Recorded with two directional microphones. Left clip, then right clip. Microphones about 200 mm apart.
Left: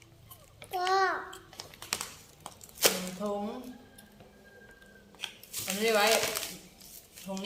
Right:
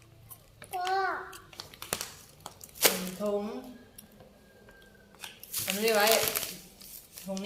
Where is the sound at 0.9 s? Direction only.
30° left (ahead or behind).